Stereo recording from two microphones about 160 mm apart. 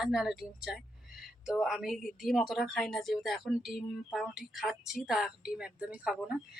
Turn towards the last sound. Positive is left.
turn(degrees=-5)  # may be behind; listen again after turning